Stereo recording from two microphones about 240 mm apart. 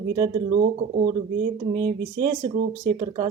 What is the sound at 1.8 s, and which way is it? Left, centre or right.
Speech, centre.